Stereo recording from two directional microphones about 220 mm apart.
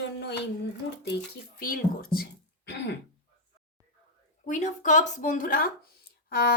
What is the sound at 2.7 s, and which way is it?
Throat clearing, 50° left (ahead or behind).